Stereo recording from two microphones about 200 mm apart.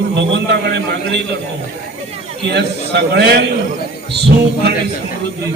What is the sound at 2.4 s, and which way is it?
A man's voice, 55° right (ahead or behind).